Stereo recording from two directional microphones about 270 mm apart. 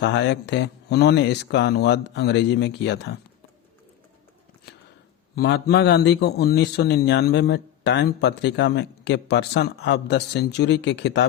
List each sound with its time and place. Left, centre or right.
0.0 s a man's voice: left
5.3 s a man's voice: left